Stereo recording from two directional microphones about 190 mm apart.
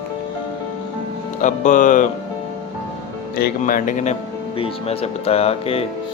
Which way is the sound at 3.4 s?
45° left (ahead or behind).